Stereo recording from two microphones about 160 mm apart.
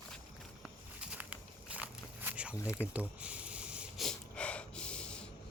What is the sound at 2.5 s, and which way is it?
Speech, 20° left (ahead or behind).